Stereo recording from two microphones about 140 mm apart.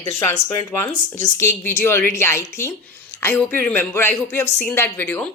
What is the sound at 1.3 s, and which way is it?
A woman's voice, 20° left (ahead or behind).